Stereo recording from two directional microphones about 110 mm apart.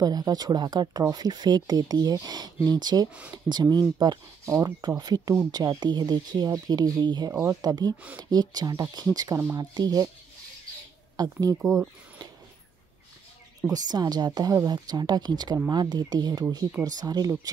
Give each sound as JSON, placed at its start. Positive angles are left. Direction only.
{"t": 0.0, "sound": "speech", "side_deg": -35}
{"t": 4.5, "sound": "speech", "side_deg": -25}
{"t": 11.2, "sound": "speech", "side_deg": -40}
{"t": 13.7, "sound": "speech", "side_deg": -35}